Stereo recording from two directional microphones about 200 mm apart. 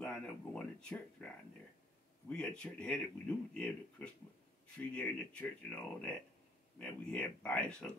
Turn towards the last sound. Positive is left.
turn(degrees=5)  # may be behind; listen again after turning